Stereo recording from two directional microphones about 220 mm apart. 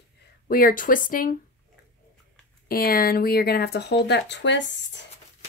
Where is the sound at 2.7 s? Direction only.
40° left (ahead or behind).